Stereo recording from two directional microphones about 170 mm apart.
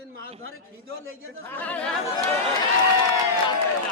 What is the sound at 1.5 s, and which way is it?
Speech, 10° left (ahead or behind).